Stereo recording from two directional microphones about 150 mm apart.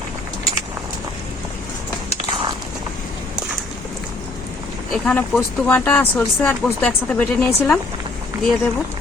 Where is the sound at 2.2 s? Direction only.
30° right (ahead or behind).